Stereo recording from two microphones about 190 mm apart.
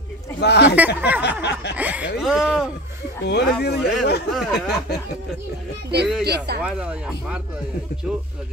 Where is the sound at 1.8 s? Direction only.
10° right (ahead or behind).